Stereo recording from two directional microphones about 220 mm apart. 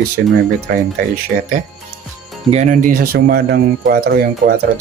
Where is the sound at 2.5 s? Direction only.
35° right (ahead or behind).